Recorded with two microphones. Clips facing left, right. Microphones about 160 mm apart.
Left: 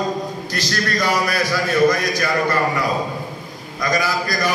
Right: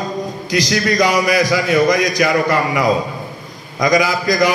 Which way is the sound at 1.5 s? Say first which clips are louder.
Right 2 dB; 80° right.